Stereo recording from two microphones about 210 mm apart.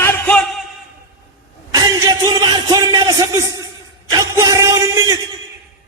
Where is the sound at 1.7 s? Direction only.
15° right (ahead or behind).